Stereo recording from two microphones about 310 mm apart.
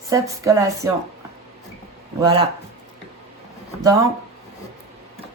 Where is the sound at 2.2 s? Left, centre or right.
Centre.